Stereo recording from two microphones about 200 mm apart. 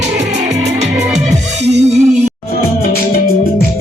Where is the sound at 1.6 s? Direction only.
35° right (ahead or behind).